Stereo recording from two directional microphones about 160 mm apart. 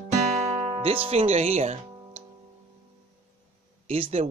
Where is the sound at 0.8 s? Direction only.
35° right (ahead or behind).